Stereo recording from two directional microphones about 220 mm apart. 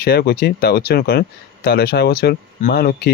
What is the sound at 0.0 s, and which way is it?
Speech, 45° left (ahead or behind).